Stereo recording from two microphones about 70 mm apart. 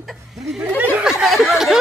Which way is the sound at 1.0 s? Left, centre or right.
Centre.